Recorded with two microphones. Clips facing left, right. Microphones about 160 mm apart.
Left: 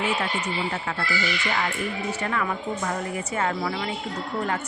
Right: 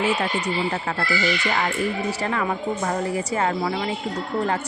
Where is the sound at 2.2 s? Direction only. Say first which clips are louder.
Right 2 dB; 30° right (ahead or behind).